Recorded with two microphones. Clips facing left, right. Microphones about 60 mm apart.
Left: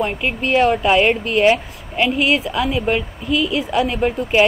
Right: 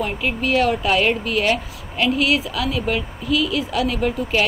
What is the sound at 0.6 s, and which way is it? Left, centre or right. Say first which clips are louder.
Speech: left 5 dB; left.